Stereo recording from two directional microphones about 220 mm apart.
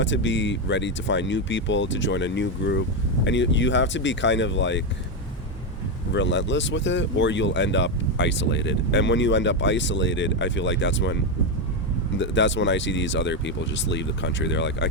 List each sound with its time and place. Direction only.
0.0 s speech: 55° left (ahead or behind)
6.1 s speech: 55° left (ahead or behind)